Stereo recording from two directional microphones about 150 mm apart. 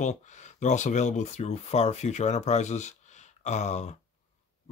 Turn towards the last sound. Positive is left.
turn(degrees=50)  # may be behind; listen again after turning